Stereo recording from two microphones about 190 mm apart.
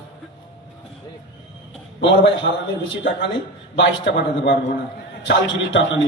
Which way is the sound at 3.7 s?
65° left (ahead or behind).